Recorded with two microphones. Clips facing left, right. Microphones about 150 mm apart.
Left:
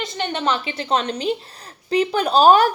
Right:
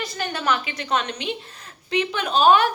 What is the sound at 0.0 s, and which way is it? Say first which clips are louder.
A woman's voice: left 3 dB; 25° left (ahead or behind).